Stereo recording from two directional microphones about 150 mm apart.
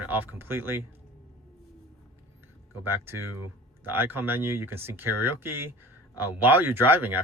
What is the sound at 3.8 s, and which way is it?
Speech, 15° right (ahead or behind).